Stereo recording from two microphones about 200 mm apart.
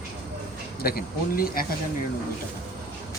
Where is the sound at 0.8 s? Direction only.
50° left (ahead or behind).